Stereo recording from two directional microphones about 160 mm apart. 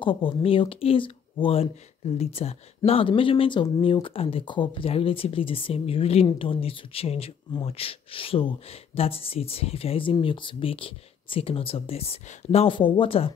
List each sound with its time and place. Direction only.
0.0 s speech: 35° left (ahead or behind)